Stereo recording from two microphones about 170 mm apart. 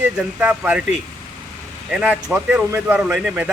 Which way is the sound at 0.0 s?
10° right (ahead or behind).